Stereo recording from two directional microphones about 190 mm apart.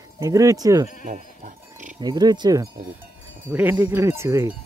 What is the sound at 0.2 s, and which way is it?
Speech, 15° right (ahead or behind).